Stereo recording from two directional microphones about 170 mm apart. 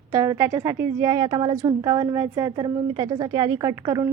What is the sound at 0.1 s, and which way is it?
A woman's voice, 20° right (ahead or behind).